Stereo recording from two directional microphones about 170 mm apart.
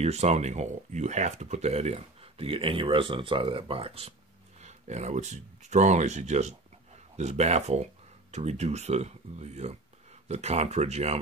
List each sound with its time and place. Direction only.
0.0 s speech: 40° right (ahead or behind)